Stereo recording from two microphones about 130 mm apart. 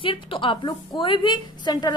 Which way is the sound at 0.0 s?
40° left (ahead or behind).